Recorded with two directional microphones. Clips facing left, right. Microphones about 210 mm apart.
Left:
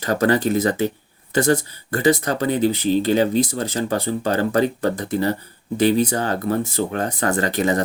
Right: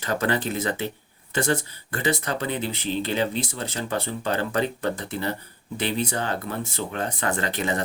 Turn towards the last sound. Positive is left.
turn(degrees=40)  # may be behind; listen again after turning